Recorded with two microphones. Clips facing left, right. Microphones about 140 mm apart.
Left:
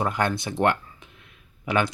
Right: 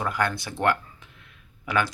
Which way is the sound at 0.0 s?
25° left (ahead or behind).